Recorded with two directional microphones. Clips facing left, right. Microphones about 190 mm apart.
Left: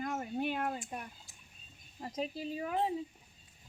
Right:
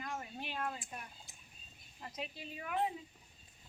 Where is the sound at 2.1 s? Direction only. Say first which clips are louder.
Left 9 dB; 35° left (ahead or behind).